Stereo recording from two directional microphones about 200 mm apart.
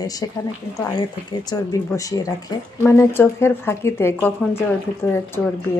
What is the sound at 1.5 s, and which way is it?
Speech, 15° left (ahead or behind).